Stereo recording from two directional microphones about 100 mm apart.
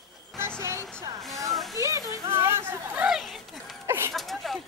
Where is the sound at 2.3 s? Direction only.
25° right (ahead or behind).